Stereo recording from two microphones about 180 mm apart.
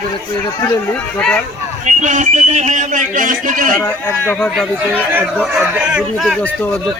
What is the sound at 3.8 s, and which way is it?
Speech, 10° left (ahead or behind).